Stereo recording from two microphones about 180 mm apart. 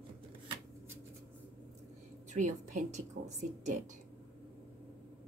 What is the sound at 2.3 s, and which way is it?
Speech, 45° right (ahead or behind).